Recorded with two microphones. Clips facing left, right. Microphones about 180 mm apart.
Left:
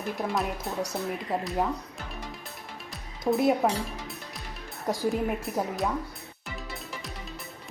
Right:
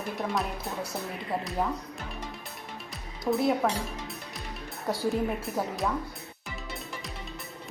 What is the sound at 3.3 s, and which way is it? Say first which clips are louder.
Speech: left 2 dB; 10° left (ahead or behind).